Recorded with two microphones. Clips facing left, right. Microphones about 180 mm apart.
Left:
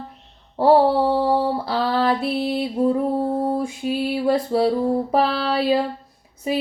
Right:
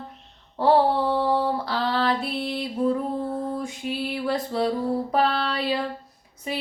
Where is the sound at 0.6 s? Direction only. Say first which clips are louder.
Left 4 dB; 30° left (ahead or behind).